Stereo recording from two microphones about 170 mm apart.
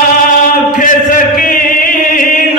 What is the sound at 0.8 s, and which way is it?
Chant, 55° left (ahead or behind).